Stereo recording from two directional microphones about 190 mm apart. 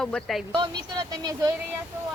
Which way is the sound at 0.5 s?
25° right (ahead or behind).